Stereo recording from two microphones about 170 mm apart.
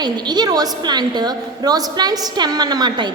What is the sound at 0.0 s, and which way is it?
A woman's voice, 25° right (ahead or behind).